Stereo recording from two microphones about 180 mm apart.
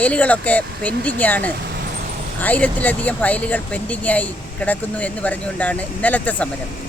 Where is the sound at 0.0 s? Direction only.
10° left (ahead or behind).